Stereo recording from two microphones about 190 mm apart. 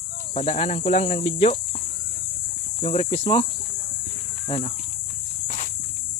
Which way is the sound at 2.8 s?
30° left (ahead or behind).